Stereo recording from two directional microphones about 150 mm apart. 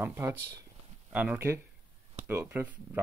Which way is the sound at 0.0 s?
15° right (ahead or behind).